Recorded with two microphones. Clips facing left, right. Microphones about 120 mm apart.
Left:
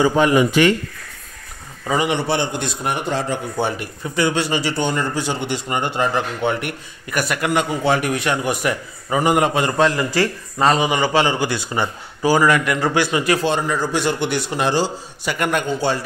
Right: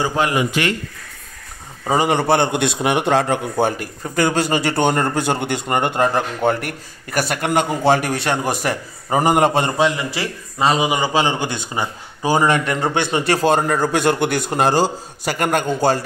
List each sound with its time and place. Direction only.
1.9 s a man's voice: 30° right (ahead or behind)
2.1 s a man's voice: 50° right (ahead or behind); by 3.3 s 70° right (ahead or behind)
3.5 s speech: 45° right (ahead or behind)
9.8 s a man's voice: 5° right (ahead or behind); by 16.0 s 40° right (ahead or behind)